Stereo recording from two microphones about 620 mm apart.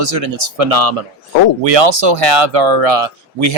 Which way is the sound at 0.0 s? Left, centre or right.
Right.